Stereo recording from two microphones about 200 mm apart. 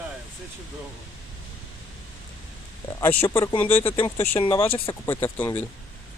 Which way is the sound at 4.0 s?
25° left (ahead or behind).